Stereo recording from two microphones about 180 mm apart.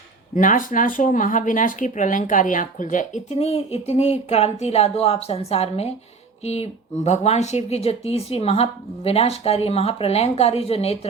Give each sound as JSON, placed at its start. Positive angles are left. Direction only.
{"t": 0.3, "sound": "speech", "side_deg": 45}